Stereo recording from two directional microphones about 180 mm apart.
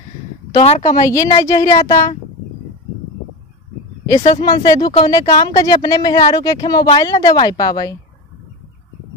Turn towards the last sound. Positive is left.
turn(degrees=20)  # may be behind; listen again after turning